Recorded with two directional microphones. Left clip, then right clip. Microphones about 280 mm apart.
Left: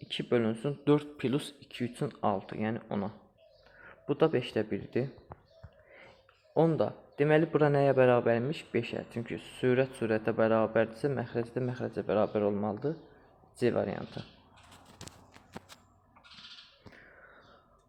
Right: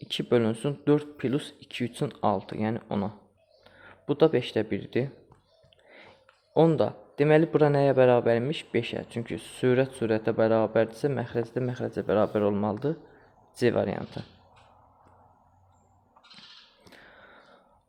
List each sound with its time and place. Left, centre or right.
0.0 s speech: right
6.5 s speech: centre
16.9 s a sound: right